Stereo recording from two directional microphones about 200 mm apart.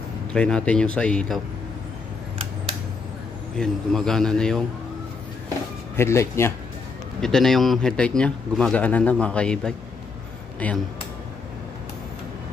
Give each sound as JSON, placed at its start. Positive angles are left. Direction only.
{"t": 0.3, "sound": "speech", "side_deg": 5}
{"t": 3.5, "sound": "speech", "side_deg": 5}
{"t": 5.9, "sound": "speech", "side_deg": 15}
{"t": 7.2, "sound": "speech", "side_deg": 0}